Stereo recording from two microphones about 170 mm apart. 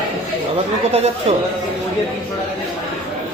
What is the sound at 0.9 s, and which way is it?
Speech, 40° right (ahead or behind).